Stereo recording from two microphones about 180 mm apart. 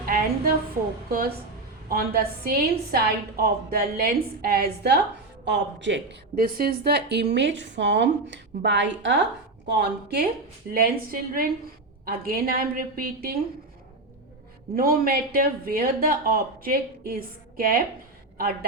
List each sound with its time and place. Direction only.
0.0 s a sound: 55° right (ahead or behind)
1.1 s a woman's voice: 55° right (ahead or behind)
5.5 s a woman's voice: 85° right
6.3 s a woman's voice: 55° right (ahead or behind); by 9.2 s 80° right
9.6 s a woman's voice: 65° right (ahead or behind)
14.8 s a woman's voice: 55° right (ahead or behind)